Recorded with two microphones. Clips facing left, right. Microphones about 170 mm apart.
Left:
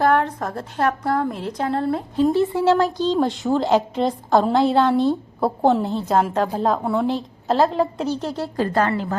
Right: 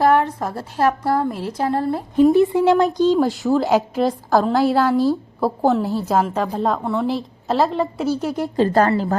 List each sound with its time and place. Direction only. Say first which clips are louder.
0.0 s a woman's voice: right 2 dB; 5° right (ahead or behind)
2.1 s a woman's voice: right 6 dB; 15° right (ahead or behind)
8.5 s a woman's voice: right 5 dB; 25° right (ahead or behind)
8.9 s a woman's voice: right 4 dB; 40° right (ahead or behind)